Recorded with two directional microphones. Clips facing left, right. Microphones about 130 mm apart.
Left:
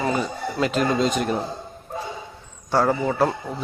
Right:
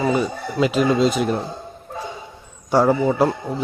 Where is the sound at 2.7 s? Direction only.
10° right (ahead or behind).